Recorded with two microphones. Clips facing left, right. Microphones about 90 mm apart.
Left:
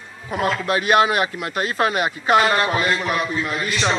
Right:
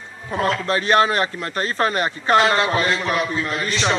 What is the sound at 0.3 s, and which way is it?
Speech, 15° left (ahead or behind).